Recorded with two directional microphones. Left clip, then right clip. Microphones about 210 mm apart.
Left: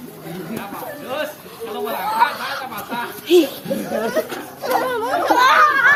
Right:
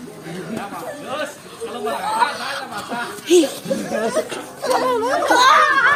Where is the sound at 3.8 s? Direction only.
5° right (ahead or behind).